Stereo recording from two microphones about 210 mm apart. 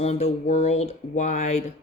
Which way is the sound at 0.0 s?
30° left (ahead or behind).